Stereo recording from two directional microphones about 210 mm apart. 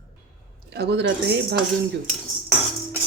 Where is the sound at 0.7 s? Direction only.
50° right (ahead or behind).